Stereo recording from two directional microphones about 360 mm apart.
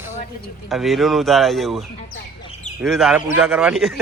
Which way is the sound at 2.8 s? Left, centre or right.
Centre.